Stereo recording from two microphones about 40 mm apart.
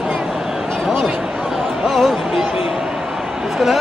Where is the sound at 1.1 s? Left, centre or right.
Centre.